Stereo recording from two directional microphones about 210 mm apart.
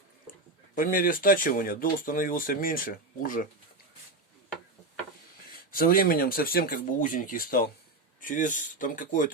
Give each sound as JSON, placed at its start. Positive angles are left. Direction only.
{"t": 0.8, "sound": "speech", "side_deg": 40}
{"t": 5.7, "sound": "speech", "side_deg": 45}